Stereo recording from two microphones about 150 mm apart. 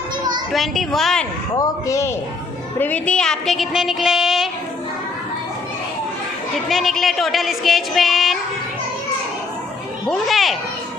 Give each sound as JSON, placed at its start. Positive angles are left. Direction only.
{"t": 0.5, "sound": "speech", "side_deg": 0}
{"t": 1.6, "sound": "speech", "side_deg": 20}
{"t": 2.8, "sound": "speech", "side_deg": 10}
{"t": 6.7, "sound": "speech", "side_deg": 0}
{"t": 10.0, "sound": "speech", "side_deg": 0}